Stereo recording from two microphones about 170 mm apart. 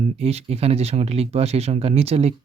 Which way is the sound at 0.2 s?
40° right (ahead or behind).